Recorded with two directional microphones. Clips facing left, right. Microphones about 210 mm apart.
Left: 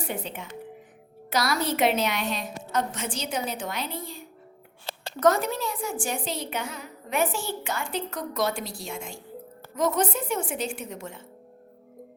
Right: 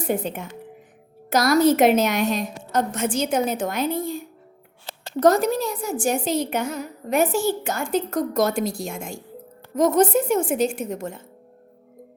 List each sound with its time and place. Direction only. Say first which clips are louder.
0.0 s a woman's voice: right 8 dB; 45° right (ahead or behind)
5.2 s a woman's voice: right 5 dB; 40° right (ahead or behind)